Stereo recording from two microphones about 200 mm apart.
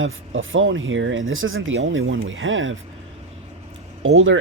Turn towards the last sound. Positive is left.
turn(degrees=-85)